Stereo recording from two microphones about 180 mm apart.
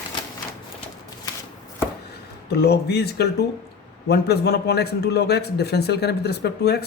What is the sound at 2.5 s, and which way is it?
A man's voice, 65° left (ahead or behind).